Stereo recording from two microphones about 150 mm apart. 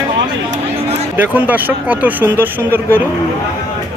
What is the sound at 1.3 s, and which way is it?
Speech, 10° right (ahead or behind).